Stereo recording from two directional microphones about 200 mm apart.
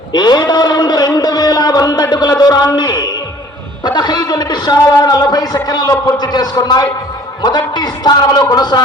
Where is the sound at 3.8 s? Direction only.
20° left (ahead or behind).